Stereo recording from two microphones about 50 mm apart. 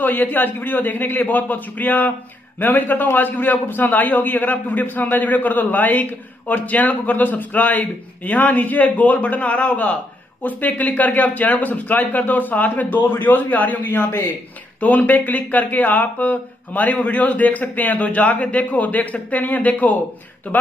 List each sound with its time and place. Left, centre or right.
0.0 s a man's voice: left
10.4 s a man's voice: left
13.8 s a man's voice: left
14.8 s a man's voice: left